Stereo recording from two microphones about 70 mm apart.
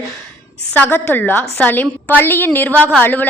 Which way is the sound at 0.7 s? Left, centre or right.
Left.